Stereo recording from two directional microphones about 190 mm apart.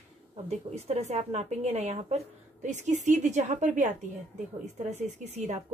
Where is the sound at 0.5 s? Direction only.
35° right (ahead or behind).